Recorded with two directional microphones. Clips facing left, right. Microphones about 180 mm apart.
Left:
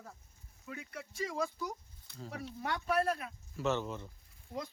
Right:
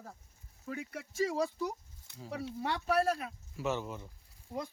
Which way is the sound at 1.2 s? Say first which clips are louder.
Right 5 dB; 35° right (ahead or behind).